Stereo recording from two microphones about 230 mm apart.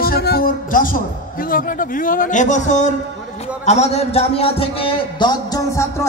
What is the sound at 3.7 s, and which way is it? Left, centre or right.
A man's voice, left.